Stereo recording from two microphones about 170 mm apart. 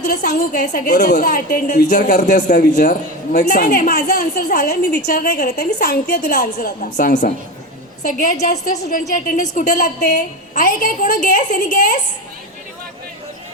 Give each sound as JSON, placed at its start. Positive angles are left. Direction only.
{"t": 0.0, "sound": "a woman's voice", "side_deg": 50}